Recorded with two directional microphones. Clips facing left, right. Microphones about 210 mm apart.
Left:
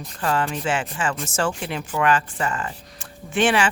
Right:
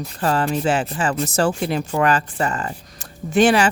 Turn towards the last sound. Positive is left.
turn(degrees=-40)  # may be behind; listen again after turning